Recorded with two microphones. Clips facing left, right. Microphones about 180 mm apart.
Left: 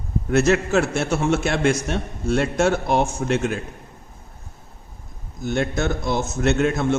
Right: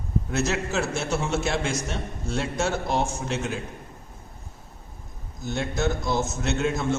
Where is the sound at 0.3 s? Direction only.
60° left (ahead or behind).